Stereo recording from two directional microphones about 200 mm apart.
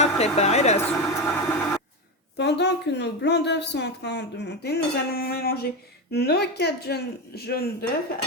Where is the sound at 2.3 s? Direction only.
60° left (ahead or behind).